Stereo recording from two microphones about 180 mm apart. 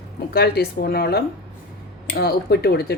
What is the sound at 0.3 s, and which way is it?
Speech, 60° left (ahead or behind).